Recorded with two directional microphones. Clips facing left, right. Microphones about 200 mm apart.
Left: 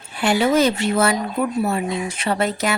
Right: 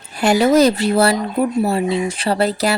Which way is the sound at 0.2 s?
40° right (ahead or behind).